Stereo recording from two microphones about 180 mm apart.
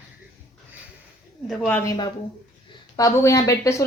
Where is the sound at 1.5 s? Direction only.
10° left (ahead or behind).